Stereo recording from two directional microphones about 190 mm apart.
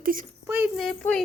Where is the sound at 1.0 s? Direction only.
5° left (ahead or behind).